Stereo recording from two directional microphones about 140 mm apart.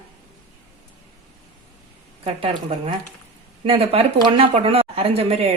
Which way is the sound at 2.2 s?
40° right (ahead or behind).